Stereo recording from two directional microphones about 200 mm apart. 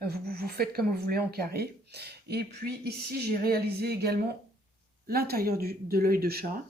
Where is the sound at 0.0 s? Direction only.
50° right (ahead or behind).